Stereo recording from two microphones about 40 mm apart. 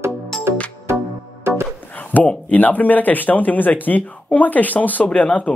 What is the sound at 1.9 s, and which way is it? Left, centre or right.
Speech, left.